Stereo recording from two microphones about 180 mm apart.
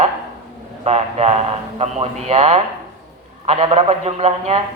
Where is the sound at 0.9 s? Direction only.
35° right (ahead or behind).